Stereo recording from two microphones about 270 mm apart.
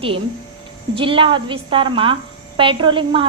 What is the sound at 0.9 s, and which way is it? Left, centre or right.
A woman's voice, centre.